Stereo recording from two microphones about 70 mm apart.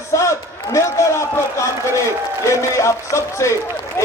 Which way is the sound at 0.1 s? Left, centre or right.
Left.